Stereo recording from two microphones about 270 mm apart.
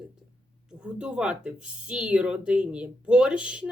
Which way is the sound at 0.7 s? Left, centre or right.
Centre.